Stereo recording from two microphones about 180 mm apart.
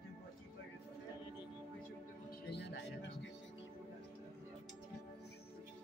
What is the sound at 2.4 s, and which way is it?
Music, 70° left (ahead or behind).